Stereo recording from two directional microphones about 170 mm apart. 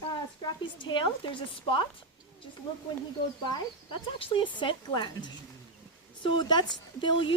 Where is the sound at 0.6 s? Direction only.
30° left (ahead or behind).